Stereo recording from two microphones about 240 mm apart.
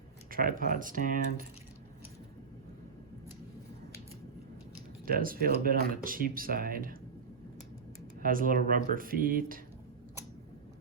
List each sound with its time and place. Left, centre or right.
0.3 s speech: right
5.0 s speech: right
8.2 s speech: right